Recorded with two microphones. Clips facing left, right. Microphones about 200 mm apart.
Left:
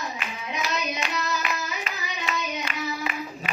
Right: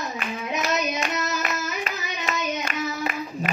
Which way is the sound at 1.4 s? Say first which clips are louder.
Right 2 dB; 45° right (ahead or behind).